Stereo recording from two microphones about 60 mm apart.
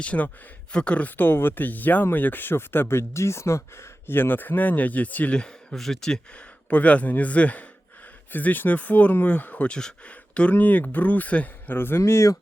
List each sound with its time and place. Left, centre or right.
0.0 s speech: left
5.4 s speech: centre
6.7 s speech: left
9.6 s speech: centre
11.7 s speech: left